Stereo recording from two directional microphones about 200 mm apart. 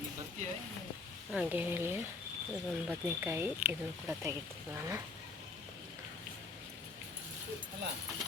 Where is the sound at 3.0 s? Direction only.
10° right (ahead or behind).